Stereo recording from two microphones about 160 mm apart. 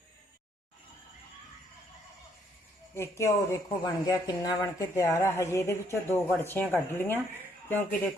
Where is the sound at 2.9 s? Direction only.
20° left (ahead or behind).